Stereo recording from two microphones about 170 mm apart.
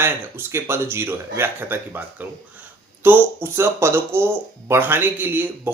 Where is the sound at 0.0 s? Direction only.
15° right (ahead or behind).